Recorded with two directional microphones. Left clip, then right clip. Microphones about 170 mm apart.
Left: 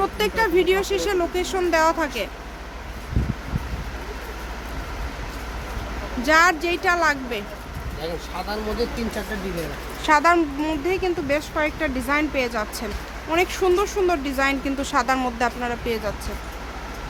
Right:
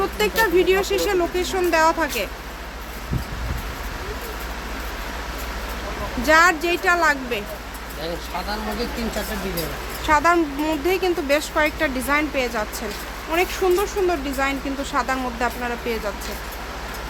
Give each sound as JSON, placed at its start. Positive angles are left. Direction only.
{"t": 0.0, "sound": "speech", "side_deg": 5}
{"t": 6.2, "sound": "speech", "side_deg": 0}
{"t": 10.1, "sound": "speech", "side_deg": 15}
{"t": 10.6, "sound": "speech", "side_deg": 0}
{"t": 12.1, "sound": "speech", "side_deg": 15}